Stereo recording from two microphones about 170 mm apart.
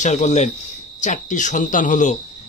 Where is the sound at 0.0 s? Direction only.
45° left (ahead or behind).